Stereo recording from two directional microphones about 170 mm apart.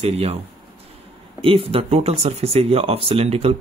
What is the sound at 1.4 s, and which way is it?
Speech, 35° right (ahead or behind).